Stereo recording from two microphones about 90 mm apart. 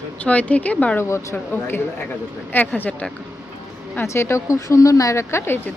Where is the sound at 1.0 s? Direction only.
30° left (ahead or behind).